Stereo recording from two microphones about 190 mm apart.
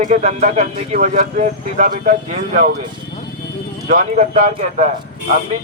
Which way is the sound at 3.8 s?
40° right (ahead or behind).